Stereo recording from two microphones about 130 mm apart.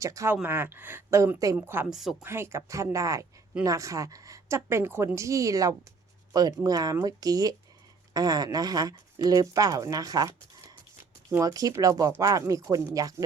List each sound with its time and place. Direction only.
0.0 s speech: 25° right (ahead or behind)
1.9 s speech: centre (ahead or behind)
2.2 s speech: 20° right (ahead or behind)